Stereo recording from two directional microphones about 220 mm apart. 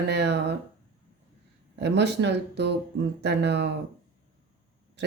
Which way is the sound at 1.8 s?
50° right (ahead or behind).